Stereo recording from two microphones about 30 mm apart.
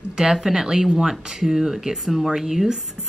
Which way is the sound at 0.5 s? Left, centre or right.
Centre.